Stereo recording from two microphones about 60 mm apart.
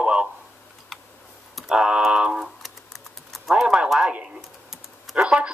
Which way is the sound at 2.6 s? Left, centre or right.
Centre.